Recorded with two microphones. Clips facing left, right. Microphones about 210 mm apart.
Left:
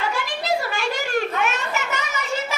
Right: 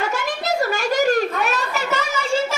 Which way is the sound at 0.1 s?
45° right (ahead or behind).